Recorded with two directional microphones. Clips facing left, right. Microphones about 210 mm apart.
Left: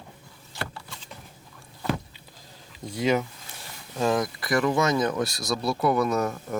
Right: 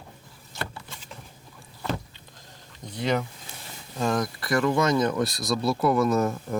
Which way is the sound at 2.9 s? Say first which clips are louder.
Left 2 dB; 5° left (ahead or behind).